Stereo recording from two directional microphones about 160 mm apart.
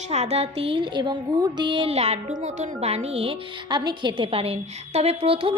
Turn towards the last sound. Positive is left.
turn(degrees=-35)  # may be behind; listen again after turning